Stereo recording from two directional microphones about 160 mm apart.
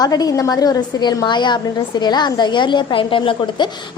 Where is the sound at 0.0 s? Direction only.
25° left (ahead or behind).